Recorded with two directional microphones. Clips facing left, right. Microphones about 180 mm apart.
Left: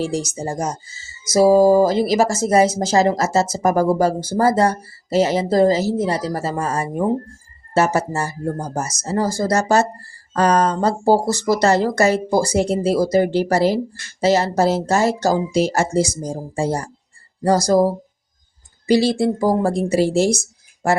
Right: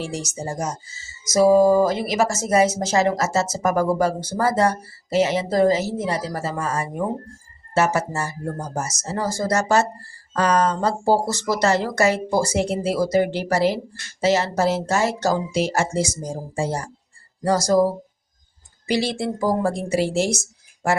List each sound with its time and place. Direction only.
0.0 s speech: 35° left (ahead or behind)
18.9 s speech: 35° left (ahead or behind)